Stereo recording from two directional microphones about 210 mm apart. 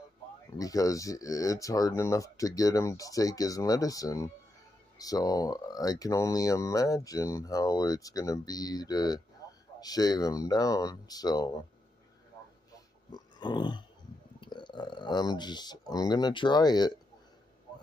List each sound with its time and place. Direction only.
0.6 s speech: 15° left (ahead or behind)
13.1 s a sound: 20° left (ahead or behind)
14.4 s speech: 20° left (ahead or behind)